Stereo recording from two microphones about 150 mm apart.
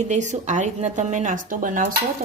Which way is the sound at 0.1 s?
55° right (ahead or behind).